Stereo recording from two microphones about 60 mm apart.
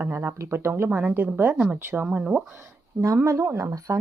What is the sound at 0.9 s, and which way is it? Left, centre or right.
Speech, right.